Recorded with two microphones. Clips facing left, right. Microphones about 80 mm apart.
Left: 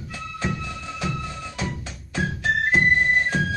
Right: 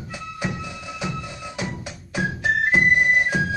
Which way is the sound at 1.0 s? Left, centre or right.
Centre.